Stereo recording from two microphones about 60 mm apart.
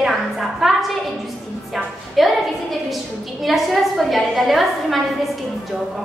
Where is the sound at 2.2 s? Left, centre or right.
Centre.